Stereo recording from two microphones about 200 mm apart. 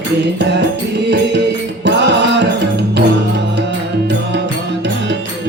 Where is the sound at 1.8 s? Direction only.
60° right (ahead or behind).